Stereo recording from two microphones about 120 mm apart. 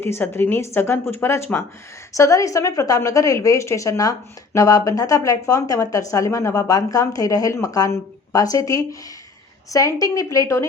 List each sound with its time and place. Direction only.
0.0 s speech: 20° left (ahead or behind)